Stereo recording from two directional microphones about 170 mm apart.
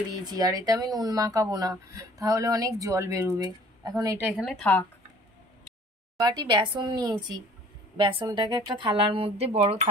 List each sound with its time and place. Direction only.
0.2 s speech: 25° right (ahead or behind)
4.3 s speech: centre (ahead or behind)
6.1 s speech: 25° right (ahead or behind); by 9.8 s 40° right (ahead or behind)